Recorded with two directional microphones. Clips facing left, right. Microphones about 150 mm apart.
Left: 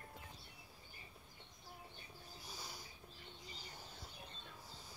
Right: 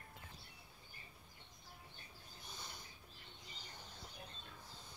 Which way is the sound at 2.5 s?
5° left (ahead or behind).